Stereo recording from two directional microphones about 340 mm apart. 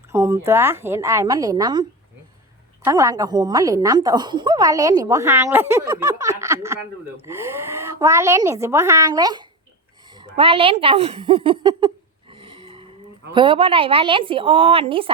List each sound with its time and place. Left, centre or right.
0.1 s a woman's voice: centre
12.3 s a sound: centre
13.3 s a woman's voice: centre